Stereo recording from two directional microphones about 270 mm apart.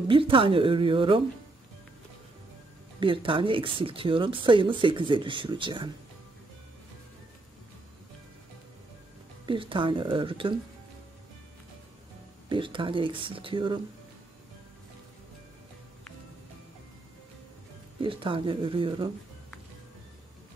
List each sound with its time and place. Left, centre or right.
0.1 s speech: centre
3.0 s speech: centre
9.5 s speech: centre
12.4 s speech: centre
18.0 s speech: centre